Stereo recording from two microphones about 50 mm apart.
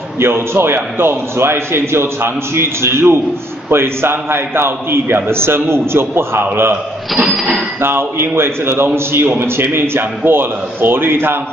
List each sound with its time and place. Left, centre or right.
0.2 s a man's voice: right
7.8 s a man's voice: right